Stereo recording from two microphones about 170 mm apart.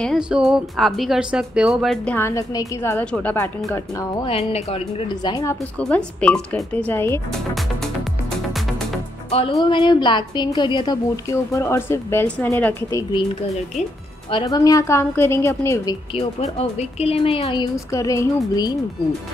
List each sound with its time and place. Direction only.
0.0 s speech: centre (ahead or behind)
2.1 s a woman's voice: 15° left (ahead or behind)
4.2 s a woman's voice: 35° left (ahead or behind)
5.8 s a woman's voice: 5° left (ahead or behind)
9.6 s a woman's voice: 25° left (ahead or behind)
14.3 s a woman's voice: 25° left (ahead or behind)
16.3 s a woman's voice: 40° left (ahead or behind); by 18.8 s 20° left (ahead or behind)